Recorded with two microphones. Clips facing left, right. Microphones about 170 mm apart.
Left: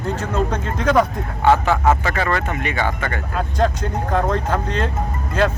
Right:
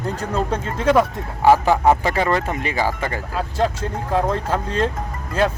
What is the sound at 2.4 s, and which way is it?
Speech, 30° right (ahead or behind).